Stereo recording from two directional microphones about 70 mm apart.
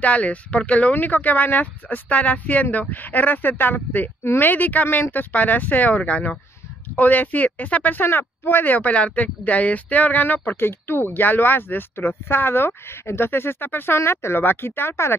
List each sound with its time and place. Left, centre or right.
0.0 s speech: left